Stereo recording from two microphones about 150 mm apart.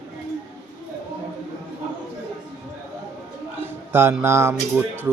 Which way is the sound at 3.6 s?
15° right (ahead or behind).